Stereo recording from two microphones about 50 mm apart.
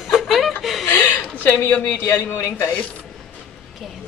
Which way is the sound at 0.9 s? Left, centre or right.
Left.